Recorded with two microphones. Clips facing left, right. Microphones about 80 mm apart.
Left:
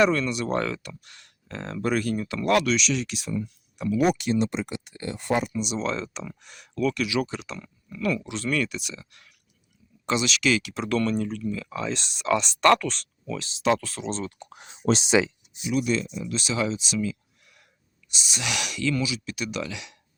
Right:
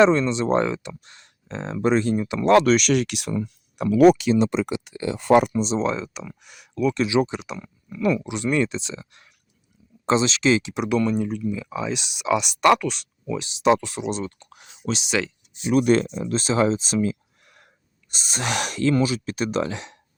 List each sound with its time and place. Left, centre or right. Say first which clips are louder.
0.0 s speech: right 5 dB; right
2.6 s speech: right 7 dB; right
5.5 s speech: right 6 dB; right
5.8 s speech: right 4 dB; centre
6.9 s speech: right 6 dB; right
14.5 s a sound: left 7 dB; left
15.7 s speech: right 7 dB; right